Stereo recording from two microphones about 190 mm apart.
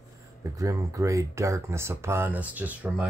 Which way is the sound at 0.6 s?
15° right (ahead or behind).